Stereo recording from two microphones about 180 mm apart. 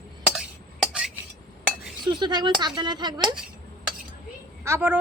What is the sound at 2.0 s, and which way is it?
Speech, 25° right (ahead or behind).